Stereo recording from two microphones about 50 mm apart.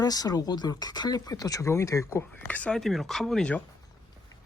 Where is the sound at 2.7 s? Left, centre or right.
Centre.